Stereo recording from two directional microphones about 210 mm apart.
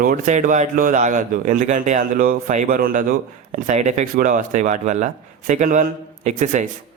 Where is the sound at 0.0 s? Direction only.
40° right (ahead or behind).